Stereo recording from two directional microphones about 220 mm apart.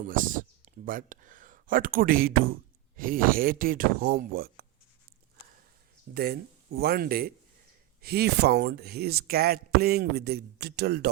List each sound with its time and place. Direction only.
0.0 s speech: 35° right (ahead or behind)
6.1 s speech: 45° right (ahead or behind)